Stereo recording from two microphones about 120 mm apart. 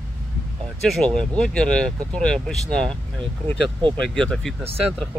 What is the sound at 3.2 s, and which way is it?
Speech, 45° right (ahead or behind).